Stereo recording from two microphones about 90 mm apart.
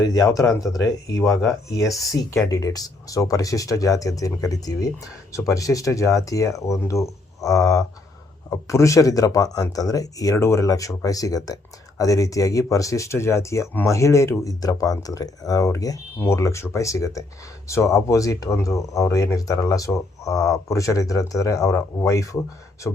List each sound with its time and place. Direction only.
0.1 s speech: 40° left (ahead or behind)
2.3 s speech: 40° left (ahead or behind)